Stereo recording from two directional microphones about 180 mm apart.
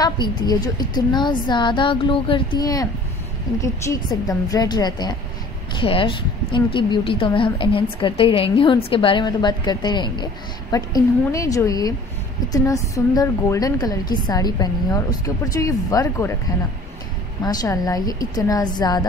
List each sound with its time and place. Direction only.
0.0 s a woman's voice: 25° left (ahead or behind)
17.4 s a woman's voice: 20° left (ahead or behind)